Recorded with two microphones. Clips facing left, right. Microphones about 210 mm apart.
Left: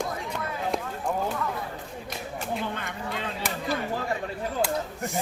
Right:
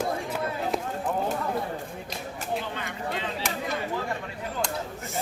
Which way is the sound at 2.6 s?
50° left (ahead or behind).